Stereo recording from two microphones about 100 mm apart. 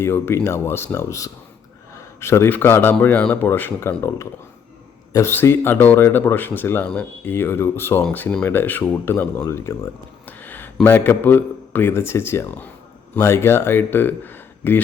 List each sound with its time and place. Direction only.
0.0 s speech: 25° left (ahead or behind)
5.1 s speech: 25° left (ahead or behind)
8.1 s speech: 15° left (ahead or behind); by 9.9 s 30° left (ahead or behind)
10.2 s a sound: 20° left (ahead or behind)
10.8 s speech: 25° left (ahead or behind)